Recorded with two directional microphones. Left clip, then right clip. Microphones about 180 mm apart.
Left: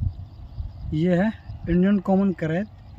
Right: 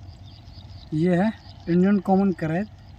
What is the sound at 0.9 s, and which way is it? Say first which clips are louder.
Speech: even; 35° left (ahead or behind).